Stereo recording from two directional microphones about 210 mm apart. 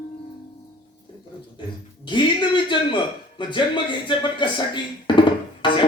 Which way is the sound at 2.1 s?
25° left (ahead or behind).